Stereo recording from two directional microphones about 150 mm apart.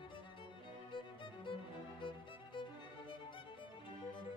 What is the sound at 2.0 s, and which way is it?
Music, 35° left (ahead or behind).